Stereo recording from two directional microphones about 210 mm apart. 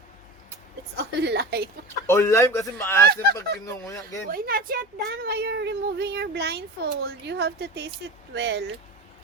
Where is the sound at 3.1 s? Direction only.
45° right (ahead or behind).